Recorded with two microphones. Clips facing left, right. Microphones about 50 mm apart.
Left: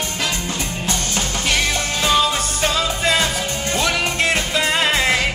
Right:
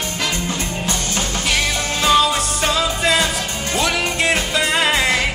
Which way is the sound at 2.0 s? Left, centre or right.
Centre.